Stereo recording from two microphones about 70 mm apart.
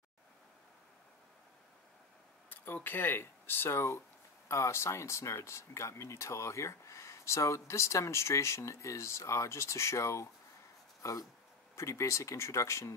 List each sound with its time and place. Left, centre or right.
2.5 s speech: left
4.5 s speech: left